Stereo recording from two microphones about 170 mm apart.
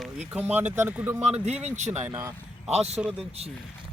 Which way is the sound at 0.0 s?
5° right (ahead or behind).